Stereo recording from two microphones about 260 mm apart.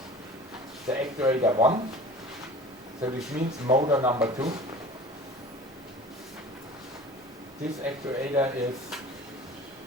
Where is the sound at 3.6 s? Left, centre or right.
Centre.